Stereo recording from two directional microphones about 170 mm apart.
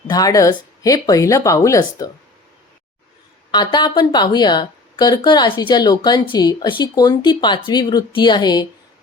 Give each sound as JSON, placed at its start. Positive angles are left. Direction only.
{"t": 0.1, "sound": "a woman's voice", "side_deg": 20}
{"t": 3.5, "sound": "a woman's voice", "side_deg": 25}